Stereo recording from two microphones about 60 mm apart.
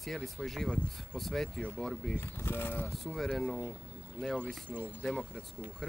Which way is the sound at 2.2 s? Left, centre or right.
Left.